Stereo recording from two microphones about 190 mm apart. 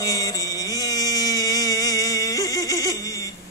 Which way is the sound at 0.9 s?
20° left (ahead or behind).